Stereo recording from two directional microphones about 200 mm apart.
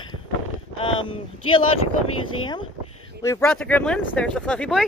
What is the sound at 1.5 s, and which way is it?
Speech, 25° left (ahead or behind).